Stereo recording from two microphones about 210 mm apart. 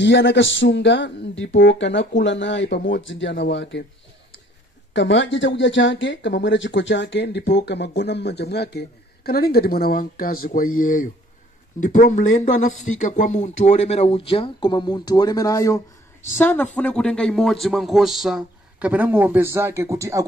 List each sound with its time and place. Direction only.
0.0 s speech: 60° left (ahead or behind)
4.9 s speech: 60° left (ahead or behind); by 20.2 s 15° right (ahead or behind)